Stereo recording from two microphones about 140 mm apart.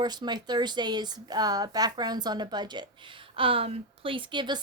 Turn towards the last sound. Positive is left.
turn(degrees=-35)  # may be behind; listen again after turning